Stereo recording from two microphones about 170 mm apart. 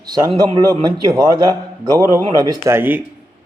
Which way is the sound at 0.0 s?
25° right (ahead or behind).